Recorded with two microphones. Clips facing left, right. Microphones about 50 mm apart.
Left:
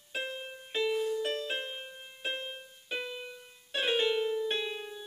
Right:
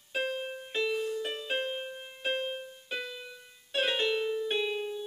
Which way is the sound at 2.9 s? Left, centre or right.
Centre.